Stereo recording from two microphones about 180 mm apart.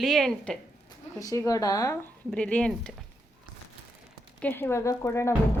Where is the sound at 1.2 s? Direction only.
20° left (ahead or behind).